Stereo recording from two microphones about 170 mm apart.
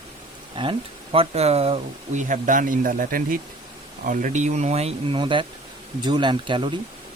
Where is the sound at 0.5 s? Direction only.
30° right (ahead or behind).